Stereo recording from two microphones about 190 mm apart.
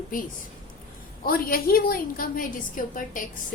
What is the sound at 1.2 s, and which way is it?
A woman's voice, 50° left (ahead or behind).